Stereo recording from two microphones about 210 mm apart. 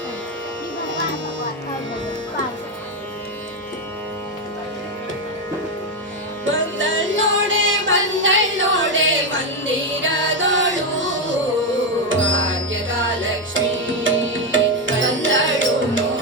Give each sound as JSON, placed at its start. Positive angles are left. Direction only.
{"t": 6.4, "sound": "music", "side_deg": -65}